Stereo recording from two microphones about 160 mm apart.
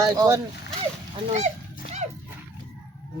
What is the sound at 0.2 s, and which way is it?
Speech, 20° right (ahead or behind).